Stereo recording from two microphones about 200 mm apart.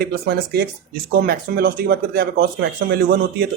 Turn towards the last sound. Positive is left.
turn(degrees=-50)  # may be behind; listen again after turning